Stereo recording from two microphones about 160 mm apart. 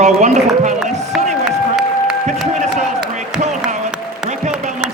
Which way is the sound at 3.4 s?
45° right (ahead or behind).